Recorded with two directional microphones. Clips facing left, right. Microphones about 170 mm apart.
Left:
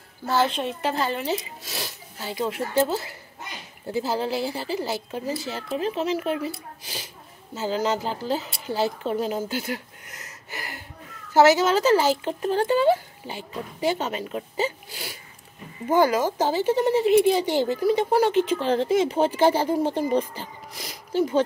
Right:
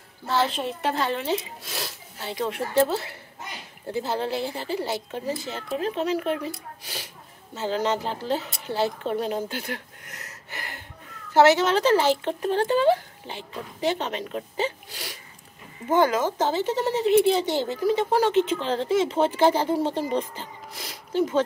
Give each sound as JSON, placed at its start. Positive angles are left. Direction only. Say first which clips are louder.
{"t": 0.3, "sound": "speech", "louder": "left 2 dB", "side_deg": 0}
{"t": 3.9, "sound": "speech", "louder": "left 1 dB", "side_deg": 5}
{"t": 10.5, "sound": "a sound", "louder": "left 2 dB", "side_deg": 5}
{"t": 11.3, "sound": "speech", "louder": "left 1 dB", "side_deg": 5}
{"t": 18.3, "sound": "speech", "louder": "even", "side_deg": -20}
{"t": 18.6, "sound": "speech", "louder": "left 2 dB", "side_deg": 15}
{"t": 19.4, "sound": "speech", "louder": "left 1 dB", "side_deg": -20}
{"t": 19.7, "sound": "speech", "louder": "left 2 dB", "side_deg": 15}